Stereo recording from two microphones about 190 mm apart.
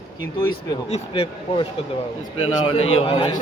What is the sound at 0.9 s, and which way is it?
Speech, 35° left (ahead or behind).